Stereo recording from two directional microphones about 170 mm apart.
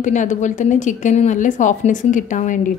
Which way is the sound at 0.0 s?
45° left (ahead or behind).